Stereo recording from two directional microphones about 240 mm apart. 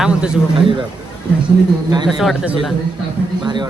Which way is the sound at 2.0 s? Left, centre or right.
Centre.